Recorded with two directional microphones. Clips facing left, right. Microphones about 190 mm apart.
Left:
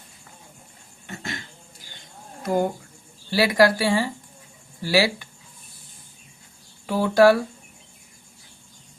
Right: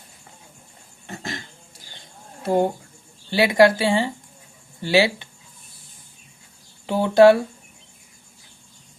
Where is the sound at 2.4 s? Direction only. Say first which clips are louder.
Right 3 dB; 30° right (ahead or behind).